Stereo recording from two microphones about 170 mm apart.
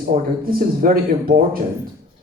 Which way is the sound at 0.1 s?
55° right (ahead or behind).